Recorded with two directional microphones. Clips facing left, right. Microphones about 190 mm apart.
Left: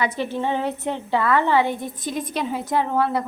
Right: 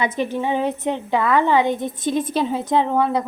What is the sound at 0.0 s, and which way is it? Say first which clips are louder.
A woman's voice: right 2 dB; 15° right (ahead or behind).